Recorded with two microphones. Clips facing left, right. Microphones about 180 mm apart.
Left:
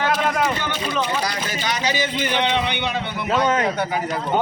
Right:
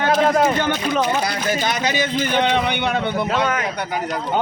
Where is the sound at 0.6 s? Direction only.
55° right (ahead or behind).